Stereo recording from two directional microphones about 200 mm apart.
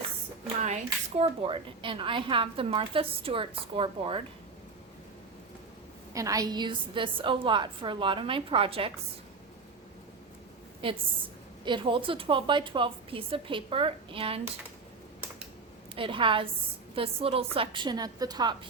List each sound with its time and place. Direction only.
0.6 s a woman's voice: 35° right (ahead or behind)
6.1 s a woman's voice: 15° right (ahead or behind)
10.8 s a woman's voice: 25° right (ahead or behind)
16.0 s a woman's voice: 25° right (ahead or behind)